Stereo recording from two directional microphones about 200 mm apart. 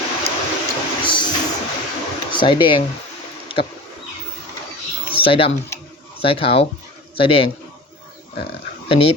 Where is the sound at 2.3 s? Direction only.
25° left (ahead or behind).